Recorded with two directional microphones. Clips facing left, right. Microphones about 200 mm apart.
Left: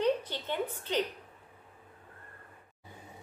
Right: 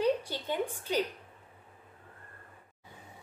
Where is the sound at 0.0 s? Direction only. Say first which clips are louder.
Even; 10° right (ahead or behind).